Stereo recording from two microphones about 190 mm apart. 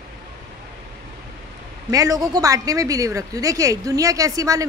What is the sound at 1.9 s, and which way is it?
A woman's voice, 20° right (ahead or behind).